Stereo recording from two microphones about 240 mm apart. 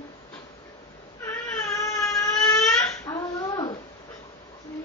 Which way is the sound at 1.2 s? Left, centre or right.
Centre.